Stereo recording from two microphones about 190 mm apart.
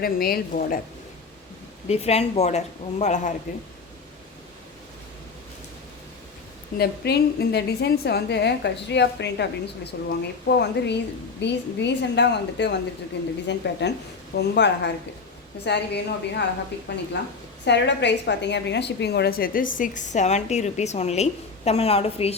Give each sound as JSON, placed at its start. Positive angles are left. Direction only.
{"t": 0.0, "sound": "a woman's voice", "side_deg": 50}
{"t": 1.9, "sound": "a woman's voice", "side_deg": 35}
{"t": 6.7, "sound": "a woman's voice", "side_deg": 55}